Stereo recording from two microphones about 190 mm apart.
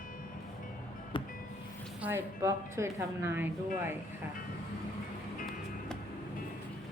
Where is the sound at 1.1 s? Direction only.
25° left (ahead or behind).